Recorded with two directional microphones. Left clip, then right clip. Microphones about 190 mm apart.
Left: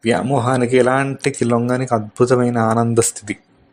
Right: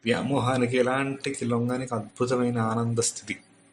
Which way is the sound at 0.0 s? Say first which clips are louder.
Left 8 dB; 45° left (ahead or behind).